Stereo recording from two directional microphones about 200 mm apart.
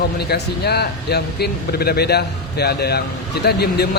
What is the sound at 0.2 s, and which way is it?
A man's voice, 55° left (ahead or behind).